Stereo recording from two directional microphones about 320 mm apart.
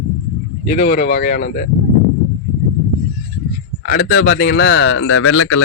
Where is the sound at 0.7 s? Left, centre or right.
Left.